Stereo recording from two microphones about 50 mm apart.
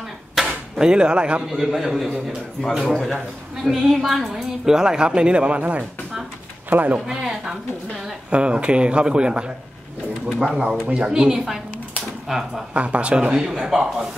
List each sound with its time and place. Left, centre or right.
0.4 s arrow: centre
0.7 s speech: centre
1.5 s a woman's voice: centre; by 7.0 s right
7.1 s speech: centre
8.3 s speech: right
10.5 s speech: centre
12.7 s speech: right
13.5 s speech: centre